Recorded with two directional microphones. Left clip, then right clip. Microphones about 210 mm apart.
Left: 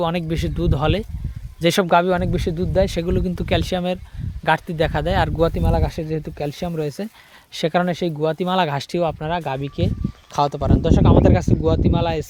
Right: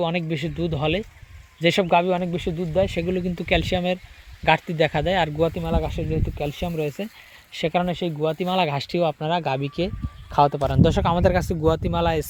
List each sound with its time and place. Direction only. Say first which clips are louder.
0.0 s speech: left 2 dB; 15° left (ahead or behind)
5.4 s speech: left 3 dB; 25° left (ahead or behind); by 12.3 s 5° right (ahead or behind)